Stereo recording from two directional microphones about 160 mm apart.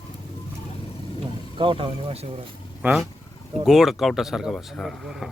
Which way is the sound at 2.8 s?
10° right (ahead or behind).